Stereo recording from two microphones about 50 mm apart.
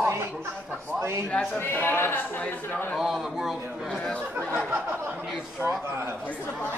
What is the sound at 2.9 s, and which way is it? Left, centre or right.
Speech, centre.